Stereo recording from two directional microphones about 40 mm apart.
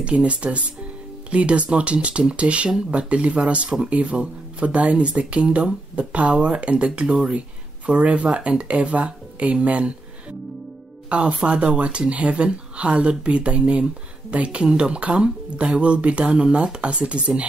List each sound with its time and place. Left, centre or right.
0.0 s speech: right
11.1 s speech: right